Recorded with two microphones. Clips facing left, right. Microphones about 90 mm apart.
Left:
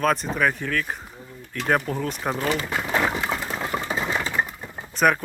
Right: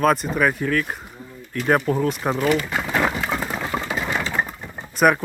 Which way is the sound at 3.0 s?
Centre (ahead or behind).